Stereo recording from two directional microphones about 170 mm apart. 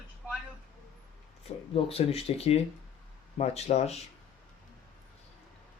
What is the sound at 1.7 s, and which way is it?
Speech, 35° left (ahead or behind).